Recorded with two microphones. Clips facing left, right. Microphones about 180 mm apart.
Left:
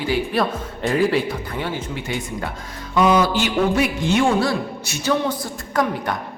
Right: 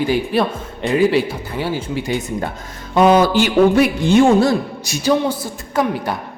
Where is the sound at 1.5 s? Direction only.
30° right (ahead or behind).